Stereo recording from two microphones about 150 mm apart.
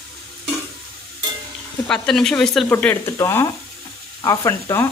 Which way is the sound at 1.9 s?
5° left (ahead or behind).